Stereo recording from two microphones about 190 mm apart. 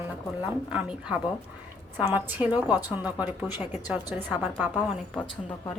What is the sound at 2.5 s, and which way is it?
Speech, 20° left (ahead or behind).